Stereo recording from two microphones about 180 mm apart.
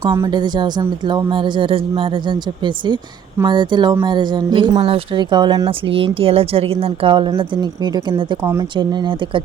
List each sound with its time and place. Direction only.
0.0 s speech: 15° right (ahead or behind)